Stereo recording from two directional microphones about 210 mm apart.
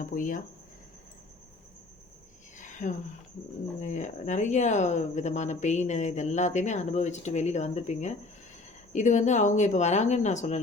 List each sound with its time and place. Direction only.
0.0 s speech: 40° left (ahead or behind)
2.6 s a sound: 35° left (ahead or behind)
3.8 s speech: 35° left (ahead or behind)